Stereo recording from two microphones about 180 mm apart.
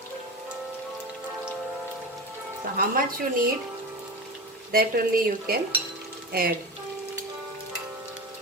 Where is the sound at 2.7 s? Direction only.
50° right (ahead or behind).